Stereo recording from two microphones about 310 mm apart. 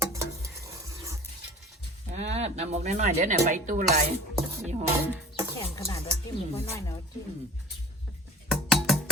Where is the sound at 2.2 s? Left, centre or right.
Right.